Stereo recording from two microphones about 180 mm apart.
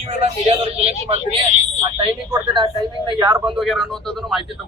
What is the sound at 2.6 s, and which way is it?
Speech, 25° right (ahead or behind).